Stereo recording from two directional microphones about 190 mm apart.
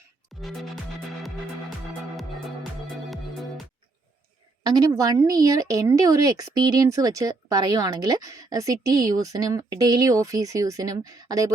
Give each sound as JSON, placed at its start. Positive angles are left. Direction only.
{"t": 0.3, "sound": "music", "side_deg": 0}
{"t": 4.6, "sound": "speech", "side_deg": -20}